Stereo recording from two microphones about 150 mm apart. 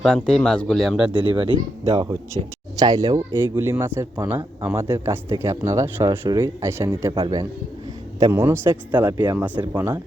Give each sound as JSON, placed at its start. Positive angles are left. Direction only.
{"t": 0.0, "sound": "speech", "side_deg": 5}
{"t": 1.2, "sound": "speech", "side_deg": -35}
{"t": 8.2, "sound": "speech", "side_deg": -15}